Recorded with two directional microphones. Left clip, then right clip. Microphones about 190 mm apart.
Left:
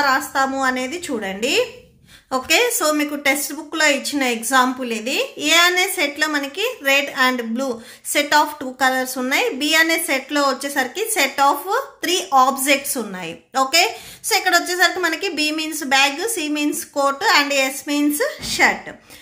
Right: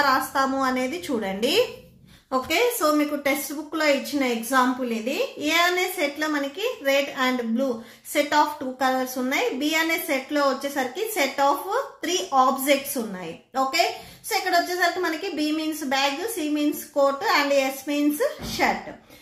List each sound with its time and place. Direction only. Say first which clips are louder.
0.0 s a woman's voice: left 3 dB; 20° left (ahead or behind)
2.4 s a woman's voice: left 5 dB; 40° left (ahead or behind)